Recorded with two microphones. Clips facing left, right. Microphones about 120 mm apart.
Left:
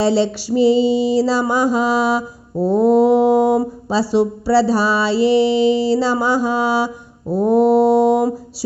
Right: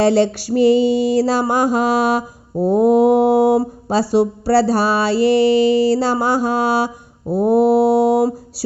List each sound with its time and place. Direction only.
0.0 s music: 50° right (ahead or behind)
2.6 s mantra: 10° right (ahead or behind)
2.9 s music: 50° right (ahead or behind)
7.3 s mantra: 10° right (ahead or behind)
7.9 s music: 45° right (ahead or behind)